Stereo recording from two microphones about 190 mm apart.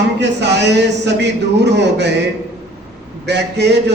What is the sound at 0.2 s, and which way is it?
Speech, 65° right (ahead or behind).